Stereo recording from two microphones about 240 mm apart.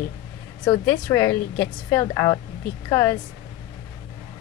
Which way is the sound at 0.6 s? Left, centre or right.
Centre.